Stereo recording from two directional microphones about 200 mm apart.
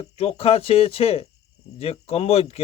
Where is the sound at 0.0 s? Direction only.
30° left (ahead or behind).